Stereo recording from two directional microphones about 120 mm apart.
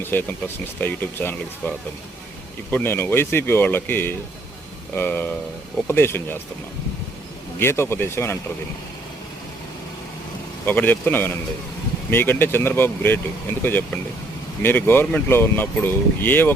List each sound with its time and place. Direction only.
0.0 s speech: 15° left (ahead or behind)
7.6 s speech: 20° left (ahead or behind)
10.7 s speech: 15° left (ahead or behind)